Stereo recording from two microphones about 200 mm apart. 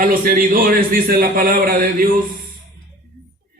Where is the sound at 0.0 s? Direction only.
45° right (ahead or behind).